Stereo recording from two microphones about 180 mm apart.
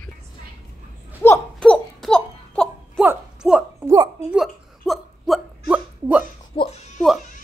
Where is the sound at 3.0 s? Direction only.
10° right (ahead or behind).